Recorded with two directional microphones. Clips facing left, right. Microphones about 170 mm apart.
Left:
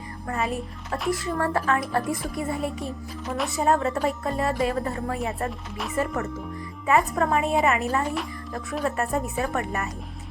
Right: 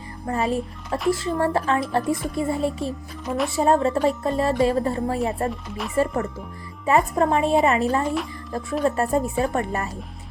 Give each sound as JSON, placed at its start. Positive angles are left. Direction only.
{"t": 0.3, "sound": "speech", "side_deg": -30}
{"t": 3.2, "sound": "speech", "side_deg": 0}
{"t": 3.5, "sound": "speech", "side_deg": -30}
{"t": 5.5, "sound": "speech", "side_deg": 0}
{"t": 6.8, "sound": "speech", "side_deg": -30}